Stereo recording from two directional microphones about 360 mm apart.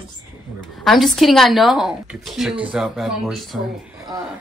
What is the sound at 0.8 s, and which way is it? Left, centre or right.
Speech, centre.